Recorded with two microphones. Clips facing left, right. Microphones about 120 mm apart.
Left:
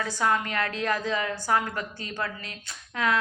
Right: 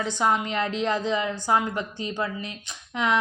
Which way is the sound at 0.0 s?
20° right (ahead or behind).